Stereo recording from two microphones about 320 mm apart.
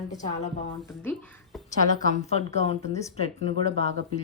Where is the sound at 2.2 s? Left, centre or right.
Centre.